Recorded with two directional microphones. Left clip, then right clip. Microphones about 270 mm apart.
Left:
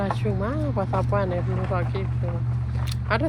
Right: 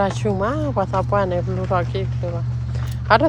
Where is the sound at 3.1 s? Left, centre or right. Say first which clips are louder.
Right 10 dB; centre.